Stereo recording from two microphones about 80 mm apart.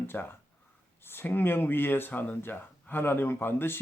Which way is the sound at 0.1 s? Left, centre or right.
Left.